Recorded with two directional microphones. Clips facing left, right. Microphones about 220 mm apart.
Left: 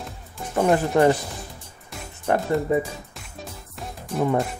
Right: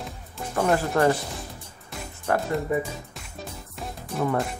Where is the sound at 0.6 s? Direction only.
20° left (ahead or behind).